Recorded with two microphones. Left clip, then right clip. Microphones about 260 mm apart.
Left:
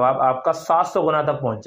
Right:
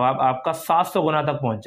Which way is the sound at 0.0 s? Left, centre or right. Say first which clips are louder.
Left 2 dB; right.